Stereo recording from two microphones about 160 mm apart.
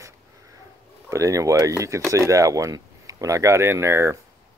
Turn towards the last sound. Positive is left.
turn(degrees=-15)  # may be behind; listen again after turning